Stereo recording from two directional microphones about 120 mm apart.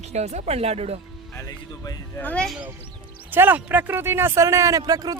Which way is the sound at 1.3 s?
30° left (ahead or behind).